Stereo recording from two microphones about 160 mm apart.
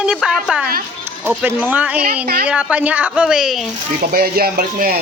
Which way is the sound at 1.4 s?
10° right (ahead or behind).